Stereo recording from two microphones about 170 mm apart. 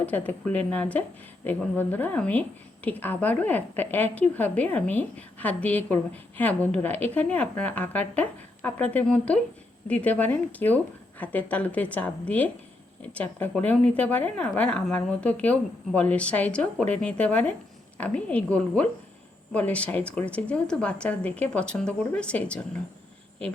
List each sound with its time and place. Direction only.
0.0 s speech: 10° left (ahead or behind)